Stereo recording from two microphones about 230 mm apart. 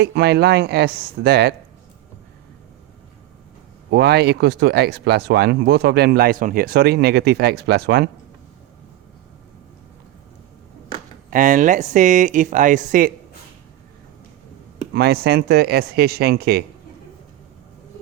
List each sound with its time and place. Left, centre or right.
0.0 s speech: right
3.9 s speech: right
11.3 s speech: right
14.9 s speech: right